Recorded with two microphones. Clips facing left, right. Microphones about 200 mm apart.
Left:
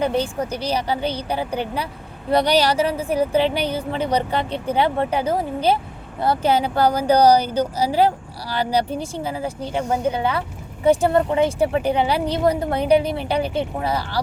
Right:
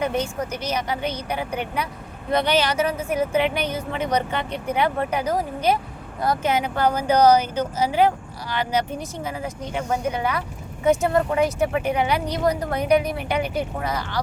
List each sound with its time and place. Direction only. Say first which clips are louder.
0.0 s speech: left 3 dB; 30° left (ahead or behind)